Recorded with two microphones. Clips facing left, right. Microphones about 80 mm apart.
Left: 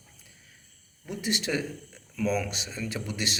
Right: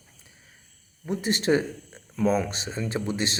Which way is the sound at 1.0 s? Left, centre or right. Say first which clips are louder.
Right 7 dB; right.